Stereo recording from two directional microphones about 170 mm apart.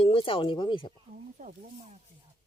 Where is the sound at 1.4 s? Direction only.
45° right (ahead or behind).